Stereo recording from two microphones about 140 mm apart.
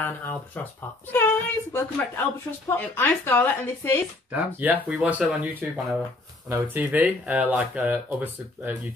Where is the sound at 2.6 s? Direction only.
15° left (ahead or behind).